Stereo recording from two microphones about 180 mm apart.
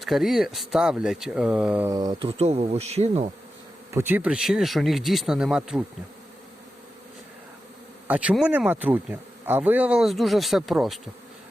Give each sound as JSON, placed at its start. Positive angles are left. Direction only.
{"t": 0.0, "sound": "speech", "side_deg": 0}
{"t": 1.9, "sound": "speech", "side_deg": -20}
{"t": 3.9, "sound": "speech", "side_deg": -10}
{"t": 8.0, "sound": "speech", "side_deg": -10}